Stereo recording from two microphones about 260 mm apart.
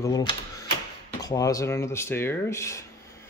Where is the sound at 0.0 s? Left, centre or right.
Centre.